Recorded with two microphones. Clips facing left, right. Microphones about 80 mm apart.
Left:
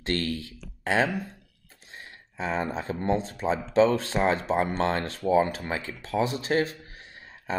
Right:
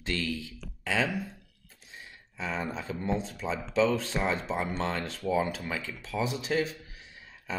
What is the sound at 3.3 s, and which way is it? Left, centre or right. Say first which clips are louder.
Speech: left 6 dB; left.